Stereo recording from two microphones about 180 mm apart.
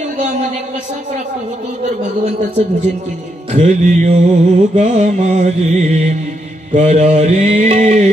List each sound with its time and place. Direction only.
3.5 s mantra: 40° right (ahead or behind)